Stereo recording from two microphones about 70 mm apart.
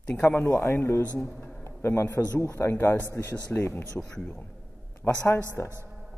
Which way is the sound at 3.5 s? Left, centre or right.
Left.